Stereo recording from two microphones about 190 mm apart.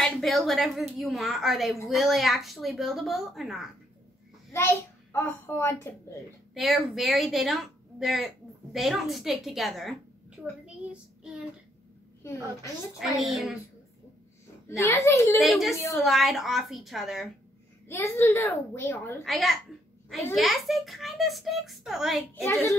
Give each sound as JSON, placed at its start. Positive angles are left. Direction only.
{"t": 0.0, "sound": "a woman's voice", "side_deg": 0}
{"t": 4.5, "sound": "a child's voice", "side_deg": 15}
{"t": 6.5, "sound": "a woman's voice", "side_deg": 0}
{"t": 13.0, "sound": "a woman's voice", "side_deg": 0}
{"t": 14.8, "sound": "a child's voice", "side_deg": 15}
{"t": 15.4, "sound": "a woman's voice", "side_deg": 0}
{"t": 17.8, "sound": "a child's voice", "side_deg": 15}
{"t": 19.2, "sound": "a woman's voice", "side_deg": 0}
{"t": 22.3, "sound": "a child's voice", "side_deg": 15}